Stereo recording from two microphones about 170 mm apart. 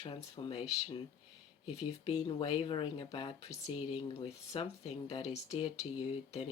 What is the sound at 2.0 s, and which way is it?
Speech, 25° left (ahead or behind).